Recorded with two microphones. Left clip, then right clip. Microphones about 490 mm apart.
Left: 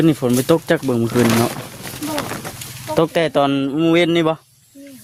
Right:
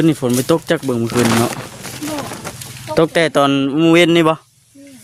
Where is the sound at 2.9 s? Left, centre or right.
Left.